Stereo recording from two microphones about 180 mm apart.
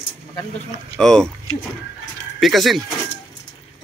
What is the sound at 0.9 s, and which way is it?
Speech, 5° left (ahead or behind).